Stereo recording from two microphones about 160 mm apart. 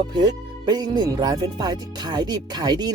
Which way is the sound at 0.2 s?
25° right (ahead or behind).